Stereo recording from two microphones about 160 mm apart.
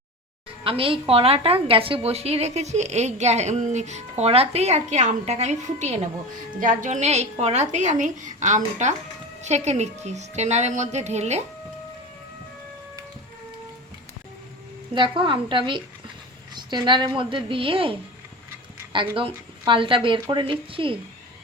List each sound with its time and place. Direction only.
0.6 s a woman's voice: 35° right (ahead or behind)
14.9 s a woman's voice: 30° right (ahead or behind)